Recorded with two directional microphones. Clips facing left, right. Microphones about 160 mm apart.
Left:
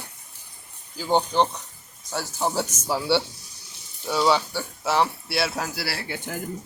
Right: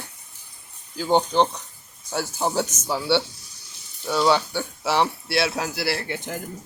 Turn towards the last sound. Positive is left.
turn(degrees=5)  # may be behind; listen again after turning